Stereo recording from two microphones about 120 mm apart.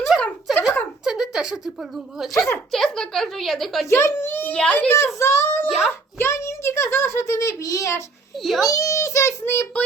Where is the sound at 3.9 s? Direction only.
25° left (ahead or behind).